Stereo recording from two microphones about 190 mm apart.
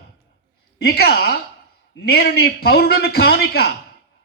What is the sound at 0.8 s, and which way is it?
A man's voice, 55° left (ahead or behind).